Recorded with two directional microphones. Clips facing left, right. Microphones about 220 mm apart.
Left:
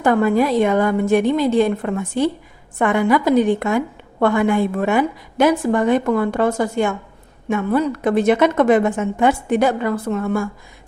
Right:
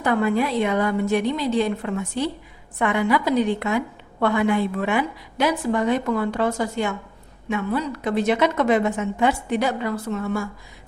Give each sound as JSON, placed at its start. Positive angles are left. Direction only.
{"t": 0.0, "sound": "a woman's voice", "side_deg": 45}